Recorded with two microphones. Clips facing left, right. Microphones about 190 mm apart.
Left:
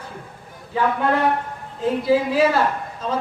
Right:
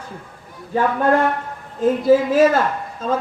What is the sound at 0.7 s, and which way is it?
Speech, 50° right (ahead or behind).